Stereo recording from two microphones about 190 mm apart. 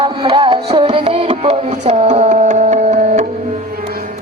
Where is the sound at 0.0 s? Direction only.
25° right (ahead or behind).